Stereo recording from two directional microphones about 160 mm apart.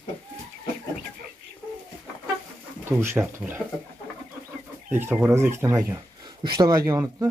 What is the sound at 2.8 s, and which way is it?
Speech, 15° right (ahead or behind).